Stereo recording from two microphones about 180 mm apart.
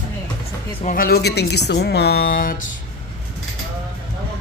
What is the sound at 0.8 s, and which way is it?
A woman's voice, 50° left (ahead or behind).